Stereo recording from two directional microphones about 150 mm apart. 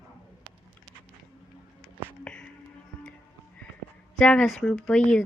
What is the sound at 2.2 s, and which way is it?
Music, 10° left (ahead or behind).